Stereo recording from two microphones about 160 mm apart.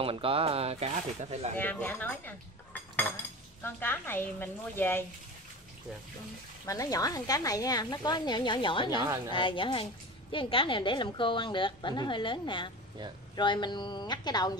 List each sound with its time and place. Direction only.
0.0 s speech: 35° right (ahead or behind)
1.6 s cutlery: 10° left (ahead or behind)
3.6 s a woman's voice: 15° left (ahead or behind)
6.6 s a woman's voice: 20° left (ahead or behind)